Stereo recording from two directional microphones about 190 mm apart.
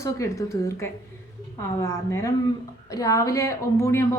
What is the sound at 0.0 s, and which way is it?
A woman's voice, 15° left (ahead or behind).